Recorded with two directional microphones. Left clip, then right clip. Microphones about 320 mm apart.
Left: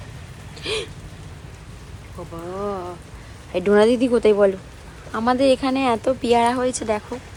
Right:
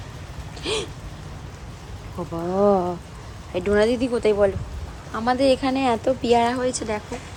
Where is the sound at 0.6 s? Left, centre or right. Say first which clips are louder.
Even; centre.